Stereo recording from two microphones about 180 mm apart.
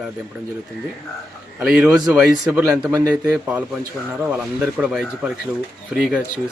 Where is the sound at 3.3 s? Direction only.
10° right (ahead or behind).